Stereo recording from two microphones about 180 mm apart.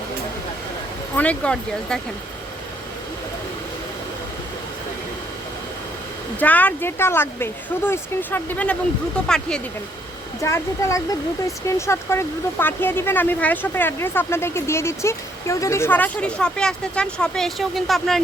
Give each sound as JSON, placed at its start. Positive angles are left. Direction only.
{"t": 1.1, "sound": "speech", "side_deg": 10}
{"t": 6.4, "sound": "speech", "side_deg": 10}
{"t": 10.4, "sound": "speech", "side_deg": 15}